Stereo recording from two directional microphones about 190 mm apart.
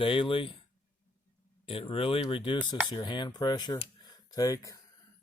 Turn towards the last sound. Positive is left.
turn(degrees=20)  # may be behind; listen again after turning